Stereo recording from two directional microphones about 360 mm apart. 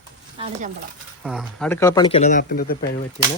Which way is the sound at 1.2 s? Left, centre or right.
Centre.